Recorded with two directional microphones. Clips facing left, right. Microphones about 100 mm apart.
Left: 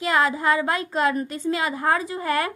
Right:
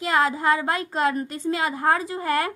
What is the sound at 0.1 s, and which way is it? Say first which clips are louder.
A woman's voice: even; 35° right (ahead or behind).